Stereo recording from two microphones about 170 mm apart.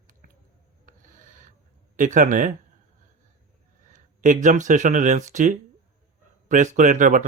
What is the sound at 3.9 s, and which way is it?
Speech, 50° right (ahead or behind).